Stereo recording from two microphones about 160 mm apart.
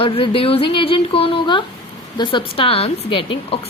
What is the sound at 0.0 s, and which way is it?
Speech, 35° left (ahead or behind).